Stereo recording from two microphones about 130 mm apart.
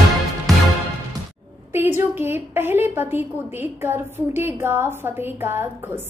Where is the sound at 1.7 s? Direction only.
15° right (ahead or behind).